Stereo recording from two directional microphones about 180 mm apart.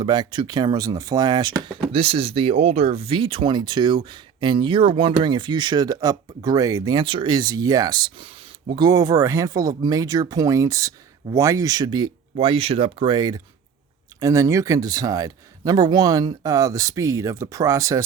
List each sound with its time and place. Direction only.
0.0 s speech: 25° right (ahead or behind)